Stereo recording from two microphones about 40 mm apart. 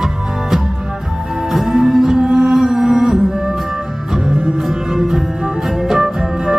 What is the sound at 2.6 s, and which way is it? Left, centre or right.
Mantra, centre.